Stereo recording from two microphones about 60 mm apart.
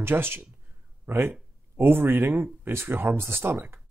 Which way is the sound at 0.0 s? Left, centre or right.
Right.